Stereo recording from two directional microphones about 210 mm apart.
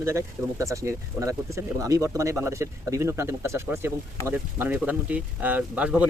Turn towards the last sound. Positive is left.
turn(degrees=-5)  # may be behind; listen again after turning